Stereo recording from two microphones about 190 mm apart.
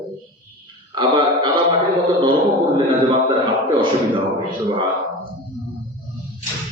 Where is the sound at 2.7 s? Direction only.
25° right (ahead or behind).